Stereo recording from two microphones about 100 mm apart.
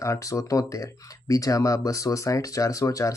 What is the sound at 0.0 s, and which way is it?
Speech, 30° left (ahead or behind).